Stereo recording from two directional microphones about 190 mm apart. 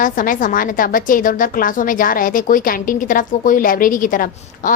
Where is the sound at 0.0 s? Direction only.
45° left (ahead or behind).